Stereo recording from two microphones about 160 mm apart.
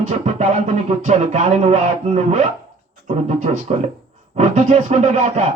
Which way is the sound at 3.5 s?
45° right (ahead or behind).